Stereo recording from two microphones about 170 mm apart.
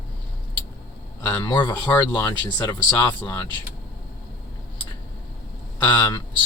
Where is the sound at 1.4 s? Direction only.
25° left (ahead or behind).